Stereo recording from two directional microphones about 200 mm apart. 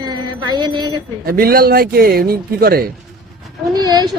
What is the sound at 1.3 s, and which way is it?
A man's voice, 50° right (ahead or behind).